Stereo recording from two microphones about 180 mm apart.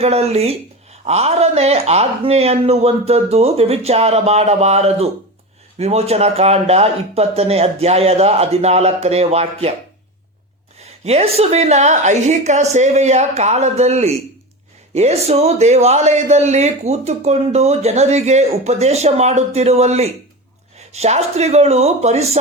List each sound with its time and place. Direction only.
0.0 s a man's voice: 35° right (ahead or behind)
11.0 s a man's voice: 35° right (ahead or behind)